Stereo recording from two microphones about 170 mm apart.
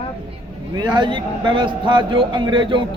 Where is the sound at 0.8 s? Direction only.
25° right (ahead or behind).